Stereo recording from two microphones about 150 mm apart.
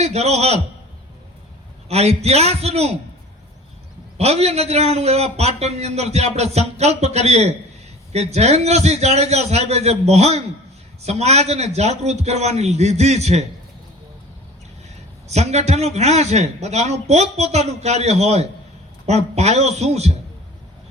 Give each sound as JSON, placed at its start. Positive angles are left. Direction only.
{"t": 0.0, "sound": "a man's voice", "side_deg": -45}
{"t": 1.9, "sound": "a man's voice", "side_deg": -45}
{"t": 4.2, "sound": "a man's voice", "side_deg": -45}
{"t": 15.3, "sound": "a man's voice", "side_deg": -45}